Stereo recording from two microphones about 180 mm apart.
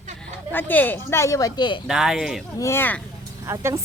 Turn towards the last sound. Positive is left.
turn(degrees=-15)  # may be behind; listen again after turning